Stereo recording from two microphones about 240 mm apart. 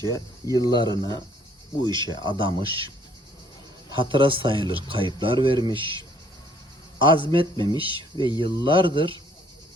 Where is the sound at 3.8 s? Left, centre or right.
Right.